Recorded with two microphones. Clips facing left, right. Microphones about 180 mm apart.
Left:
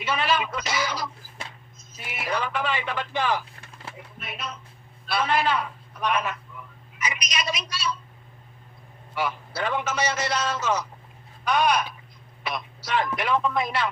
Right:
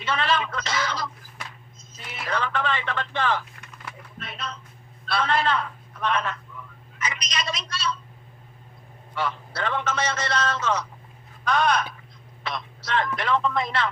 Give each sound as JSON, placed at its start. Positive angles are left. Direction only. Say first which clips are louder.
{"t": 0.0, "sound": "a sound", "louder": "even", "side_deg": 5}
{"t": 2.2, "sound": "a man's voice", "louder": "even", "side_deg": 10}
{"t": 3.5, "sound": "typing", "louder": "even", "side_deg": 30}
{"t": 4.2, "sound": "a sound", "louder": "even", "side_deg": 5}
{"t": 5.0, "sound": "a man's voice", "louder": "even", "side_deg": 5}
{"t": 9.6, "sound": "a man's voice", "louder": "left 1 dB", "side_deg": 10}